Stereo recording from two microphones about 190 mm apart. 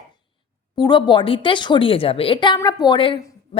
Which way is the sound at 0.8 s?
25° left (ahead or behind).